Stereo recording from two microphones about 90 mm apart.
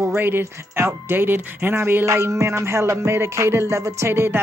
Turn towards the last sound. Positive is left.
turn(degrees=-25)  # may be behind; listen again after turning